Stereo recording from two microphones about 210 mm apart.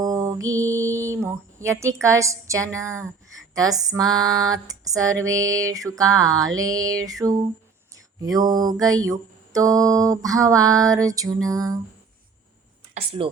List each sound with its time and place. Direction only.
0.0 s mantra: 15° right (ahead or behind)